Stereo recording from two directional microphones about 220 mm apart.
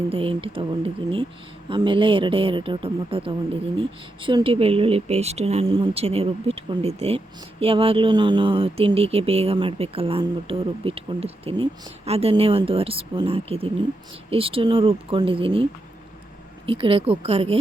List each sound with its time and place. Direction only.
0.1 s speech: 25° right (ahead or behind)
16.6 s speech: 25° right (ahead or behind)